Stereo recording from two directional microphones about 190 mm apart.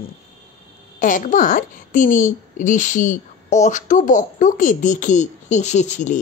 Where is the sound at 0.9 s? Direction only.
40° left (ahead or behind).